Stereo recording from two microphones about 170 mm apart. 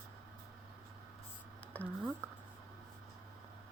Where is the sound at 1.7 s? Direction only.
10° left (ahead or behind).